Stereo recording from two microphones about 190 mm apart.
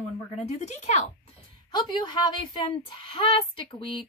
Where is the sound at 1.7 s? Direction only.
25° left (ahead or behind).